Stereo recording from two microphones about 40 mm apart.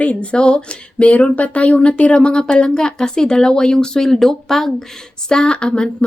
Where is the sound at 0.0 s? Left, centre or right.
Left; by 4.9 s centre.